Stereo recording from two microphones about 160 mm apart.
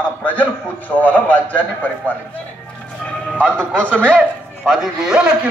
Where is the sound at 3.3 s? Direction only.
5° left (ahead or behind).